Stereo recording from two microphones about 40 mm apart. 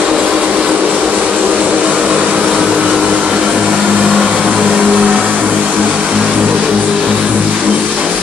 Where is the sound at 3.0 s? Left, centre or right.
Right.